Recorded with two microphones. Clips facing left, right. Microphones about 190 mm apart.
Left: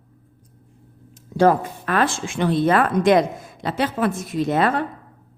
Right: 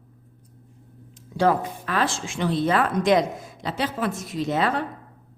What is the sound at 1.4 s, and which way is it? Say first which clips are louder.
A woman's voice: left 4 dB; 50° left (ahead or behind).